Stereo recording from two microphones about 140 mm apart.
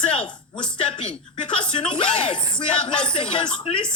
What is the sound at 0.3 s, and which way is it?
Speech, 35° left (ahead or behind).